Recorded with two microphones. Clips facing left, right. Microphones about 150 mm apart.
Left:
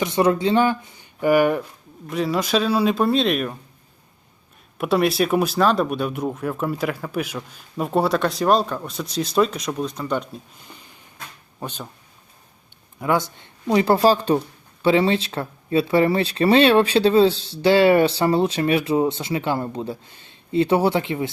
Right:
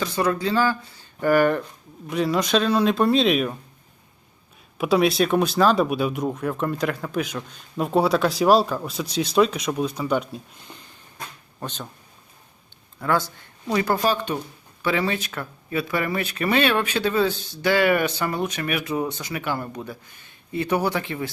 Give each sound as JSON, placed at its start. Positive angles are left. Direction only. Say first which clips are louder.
{"t": 0.0, "sound": "speech", "louder": "left 4 dB", "side_deg": 25}
{"t": 2.0, "sound": "speech", "louder": "even", "side_deg": 0}
{"t": 4.8, "sound": "speech", "louder": "even", "side_deg": 0}
{"t": 11.6, "sound": "speech", "louder": "left 1 dB", "side_deg": 10}
{"t": 13.0, "sound": "speech", "louder": "left 2 dB", "side_deg": 20}